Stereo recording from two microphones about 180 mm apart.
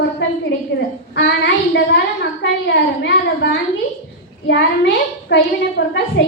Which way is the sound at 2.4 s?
75° left (ahead or behind).